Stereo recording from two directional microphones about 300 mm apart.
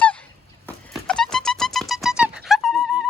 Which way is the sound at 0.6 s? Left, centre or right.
Centre.